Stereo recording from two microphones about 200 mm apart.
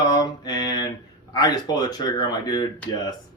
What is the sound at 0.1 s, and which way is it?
Mantra, 20° left (ahead or behind).